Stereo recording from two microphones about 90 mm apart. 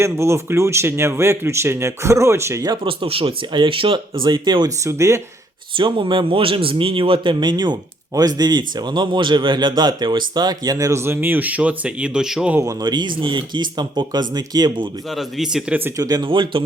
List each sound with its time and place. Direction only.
0.0 s speech: 30° right (ahead or behind)
2.8 s speech: 85° right; by 4.7 s 55° right (ahead or behind)
4.9 s speech: 35° right (ahead or behind)
5.7 s speech: 70° right (ahead or behind); by 12.5 s 5° right (ahead or behind)
12.8 s speech: 55° right (ahead or behind)
15.1 s speech: 5° right (ahead or behind)
16.0 s speech: 45° right (ahead or behind)
16.2 s speech: 65° right (ahead or behind)